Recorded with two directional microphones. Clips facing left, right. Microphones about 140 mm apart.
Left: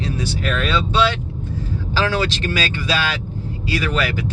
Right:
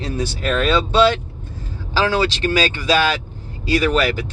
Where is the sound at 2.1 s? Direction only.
30° right (ahead or behind).